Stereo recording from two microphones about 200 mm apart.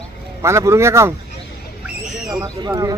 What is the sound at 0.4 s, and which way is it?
Speech, 15° right (ahead or behind).